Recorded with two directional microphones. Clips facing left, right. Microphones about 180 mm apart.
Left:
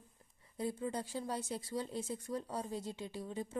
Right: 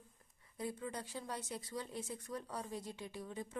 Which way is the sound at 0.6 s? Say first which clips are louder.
Left 5 dB; 30° left (ahead or behind).